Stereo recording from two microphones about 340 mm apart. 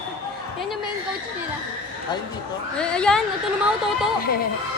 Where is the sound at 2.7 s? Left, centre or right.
Centre.